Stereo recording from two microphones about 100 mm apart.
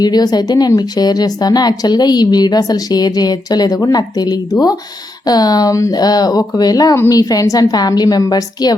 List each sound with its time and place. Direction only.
0.0 s a woman's voice: 45° left (ahead or behind)